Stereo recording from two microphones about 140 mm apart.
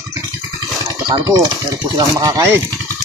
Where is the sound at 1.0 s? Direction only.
30° right (ahead or behind).